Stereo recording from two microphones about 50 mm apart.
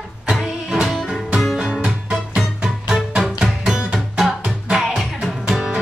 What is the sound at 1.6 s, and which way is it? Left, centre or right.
Music, right.